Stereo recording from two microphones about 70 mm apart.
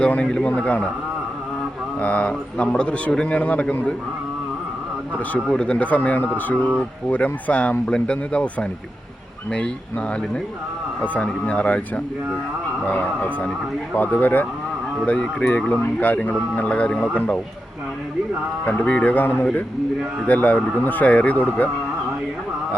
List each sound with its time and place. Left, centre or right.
0.0 s a man's voice: centre
2.0 s a man's voice: centre
5.5 s a man's voice: centre
11.0 s speech: left
18.6 s speech: centre